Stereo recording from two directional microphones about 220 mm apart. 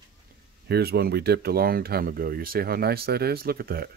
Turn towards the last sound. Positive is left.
turn(degrees=-45)  # may be behind; listen again after turning